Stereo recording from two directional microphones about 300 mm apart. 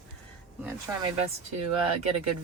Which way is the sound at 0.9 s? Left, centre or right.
Centre.